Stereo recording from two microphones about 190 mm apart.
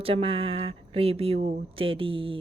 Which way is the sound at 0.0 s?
30° right (ahead or behind).